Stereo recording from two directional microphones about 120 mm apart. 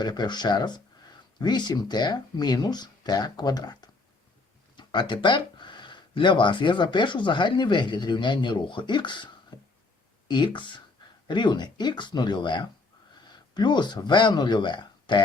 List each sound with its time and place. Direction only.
0.0 s speech: 35° left (ahead or behind)
9.5 s a sound: 40° left (ahead or behind)
10.2 s speech: 40° left (ahead or behind)